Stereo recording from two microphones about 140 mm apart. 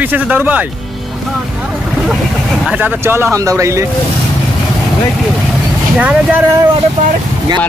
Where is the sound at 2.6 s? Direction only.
10° right (ahead or behind).